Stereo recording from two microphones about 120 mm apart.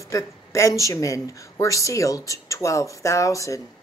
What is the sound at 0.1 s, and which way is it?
A woman's voice, 25° left (ahead or behind).